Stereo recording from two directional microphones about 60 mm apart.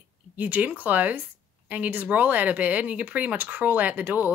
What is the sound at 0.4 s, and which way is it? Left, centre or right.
Speech, right.